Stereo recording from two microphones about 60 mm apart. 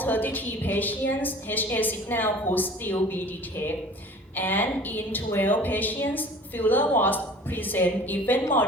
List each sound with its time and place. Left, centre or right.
0.0 s a woman's voice: left
4.4 s a woman's voice: left